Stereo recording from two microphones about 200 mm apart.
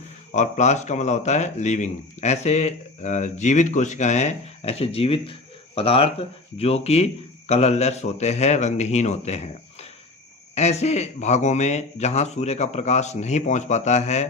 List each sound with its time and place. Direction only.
0.3 s speech: 35° left (ahead or behind)
10.5 s speech: 35° left (ahead or behind)